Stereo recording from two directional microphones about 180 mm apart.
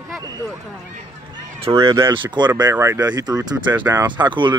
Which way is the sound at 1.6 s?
30° right (ahead or behind).